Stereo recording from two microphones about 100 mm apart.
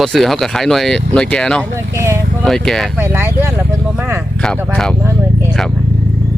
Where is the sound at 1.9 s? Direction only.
25° right (ahead or behind).